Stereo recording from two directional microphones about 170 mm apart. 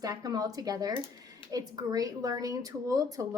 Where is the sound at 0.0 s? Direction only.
20° right (ahead or behind).